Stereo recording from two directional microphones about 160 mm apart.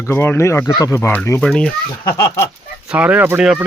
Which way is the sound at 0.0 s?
15° left (ahead or behind).